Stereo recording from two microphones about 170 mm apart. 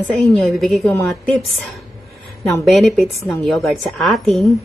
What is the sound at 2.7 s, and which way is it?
A woman's voice, centre (ahead or behind).